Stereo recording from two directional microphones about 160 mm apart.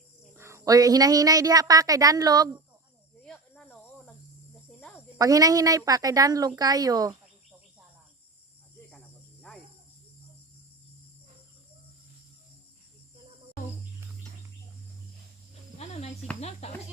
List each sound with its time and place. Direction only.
0.3 s a woman's voice: 20° right (ahead or behind)
3.2 s snake: 5° left (ahead or behind)
4.5 s cricket: centre (ahead or behind)
5.1 s a woman's voice: 20° right (ahead or behind)
15.8 s cricket: 40° left (ahead or behind)
16.4 s speech: 45° left (ahead or behind)